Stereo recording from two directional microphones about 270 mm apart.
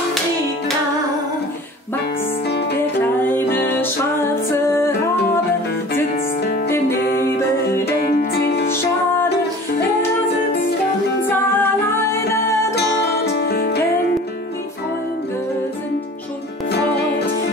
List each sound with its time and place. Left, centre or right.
2.4 s music: left
3.0 s music: centre
7.8 s music: left
11.2 s music: centre
12.7 s music: left